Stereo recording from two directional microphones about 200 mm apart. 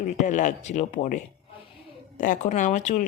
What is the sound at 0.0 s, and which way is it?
Speech, 40° left (ahead or behind).